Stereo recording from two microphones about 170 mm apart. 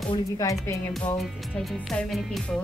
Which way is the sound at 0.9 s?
Centre (ahead or behind).